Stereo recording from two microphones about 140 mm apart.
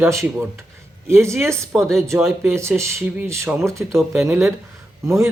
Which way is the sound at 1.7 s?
Centre (ahead or behind).